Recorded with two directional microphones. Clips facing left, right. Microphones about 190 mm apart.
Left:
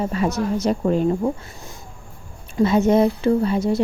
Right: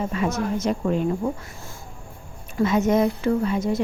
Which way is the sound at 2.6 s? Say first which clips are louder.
Left 3 dB; 30° left (ahead or behind).